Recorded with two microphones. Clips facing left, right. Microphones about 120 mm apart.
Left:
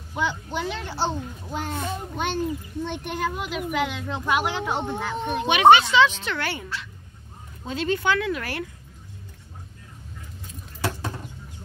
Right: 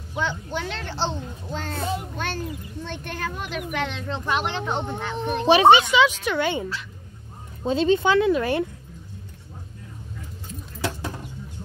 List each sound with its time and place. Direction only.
0.2 s a child's voice: 10° left (ahead or behind)
5.5 s speech: 30° right (ahead or behind)
5.8 s speech: 15° right (ahead or behind)